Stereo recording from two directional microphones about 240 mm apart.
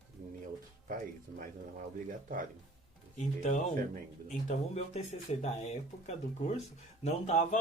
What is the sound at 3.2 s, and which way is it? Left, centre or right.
Speech, left.